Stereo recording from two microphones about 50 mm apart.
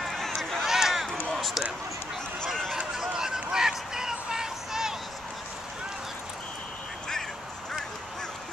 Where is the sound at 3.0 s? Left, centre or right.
Centre.